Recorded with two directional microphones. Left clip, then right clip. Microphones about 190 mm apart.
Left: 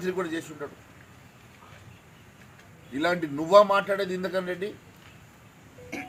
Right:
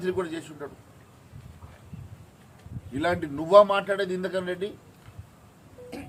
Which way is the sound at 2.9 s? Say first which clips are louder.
Left 1 dB; 25° right (ahead or behind).